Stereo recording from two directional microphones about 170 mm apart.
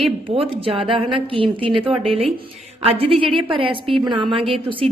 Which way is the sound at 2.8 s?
35° right (ahead or behind).